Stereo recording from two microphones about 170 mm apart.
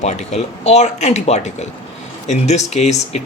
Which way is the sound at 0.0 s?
40° left (ahead or behind).